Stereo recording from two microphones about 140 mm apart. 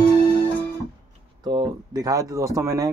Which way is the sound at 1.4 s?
25° right (ahead or behind).